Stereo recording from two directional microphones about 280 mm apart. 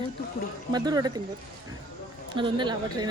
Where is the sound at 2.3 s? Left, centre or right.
Centre.